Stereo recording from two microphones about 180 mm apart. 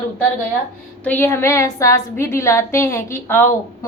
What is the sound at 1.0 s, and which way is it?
A woman's voice, 10° left (ahead or behind).